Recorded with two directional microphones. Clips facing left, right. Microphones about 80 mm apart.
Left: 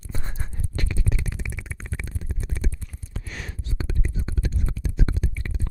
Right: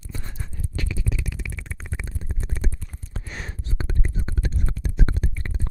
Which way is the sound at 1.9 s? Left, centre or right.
Right.